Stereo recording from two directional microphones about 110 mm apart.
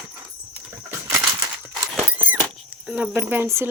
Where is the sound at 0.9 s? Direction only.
25° right (ahead or behind).